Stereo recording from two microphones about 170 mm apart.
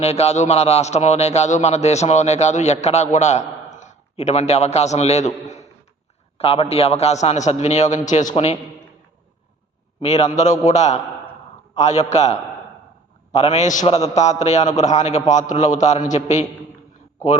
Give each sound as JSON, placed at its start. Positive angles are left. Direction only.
{"t": 0.0, "sound": "a man's voice", "side_deg": 40}
{"t": 10.0, "sound": "a man's voice", "side_deg": 40}